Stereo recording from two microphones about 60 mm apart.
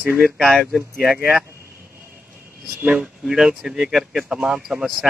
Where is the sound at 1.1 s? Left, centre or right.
Right.